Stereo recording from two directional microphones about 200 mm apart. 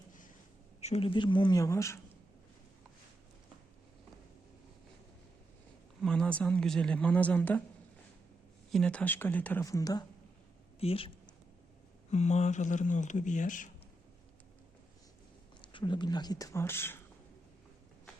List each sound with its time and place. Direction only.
0.8 s speech: 30° left (ahead or behind); by 2.0 s 15° left (ahead or behind)
6.0 s speech: 5° left (ahead or behind)
8.7 s speech: 5° left (ahead or behind)
10.8 s speech: 30° left (ahead or behind)
12.1 s speech: 35° left (ahead or behind)
15.6 s speech: 25° left (ahead or behind)